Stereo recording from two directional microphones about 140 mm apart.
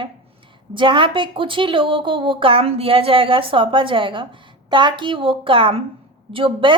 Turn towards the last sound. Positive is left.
turn(degrees=-35)  # may be behind; listen again after turning